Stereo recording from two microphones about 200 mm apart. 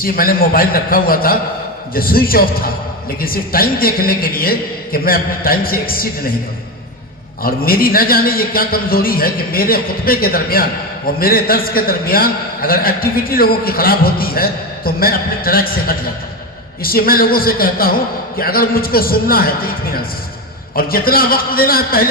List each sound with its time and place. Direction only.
0.0 s a man's voice: 45° left (ahead or behind)
7.4 s a man's voice: 45° left (ahead or behind)